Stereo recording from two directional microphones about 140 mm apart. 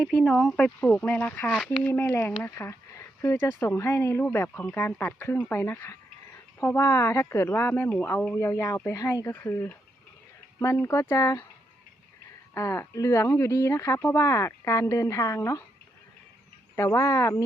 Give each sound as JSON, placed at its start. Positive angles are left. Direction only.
{"t": 0.0, "sound": "speech", "side_deg": 5}
{"t": 1.9, "sound": "speech", "side_deg": 15}
{"t": 12.5, "sound": "speech", "side_deg": 20}
{"t": 16.7, "sound": "speech", "side_deg": 20}